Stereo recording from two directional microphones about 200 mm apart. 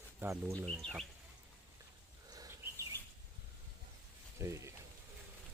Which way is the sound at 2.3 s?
20° right (ahead or behind).